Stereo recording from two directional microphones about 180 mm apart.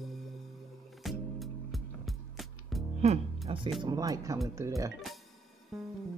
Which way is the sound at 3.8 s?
20° right (ahead or behind).